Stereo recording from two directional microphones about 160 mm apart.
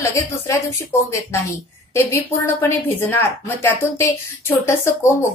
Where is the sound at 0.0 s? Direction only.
20° left (ahead or behind).